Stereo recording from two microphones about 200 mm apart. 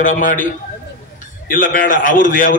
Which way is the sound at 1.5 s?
45° left (ahead or behind).